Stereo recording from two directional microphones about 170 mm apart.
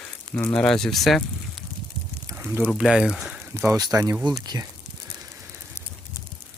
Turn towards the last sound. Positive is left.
turn(degrees=-25)  # may be behind; listen again after turning